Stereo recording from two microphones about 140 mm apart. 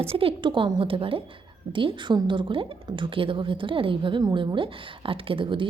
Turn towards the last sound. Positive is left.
turn(degrees=-40)  # may be behind; listen again after turning